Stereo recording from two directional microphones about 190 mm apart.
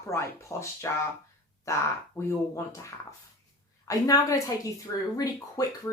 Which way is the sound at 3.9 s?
20° left (ahead or behind).